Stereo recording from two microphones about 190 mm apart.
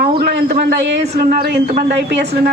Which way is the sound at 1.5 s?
60° right (ahead or behind).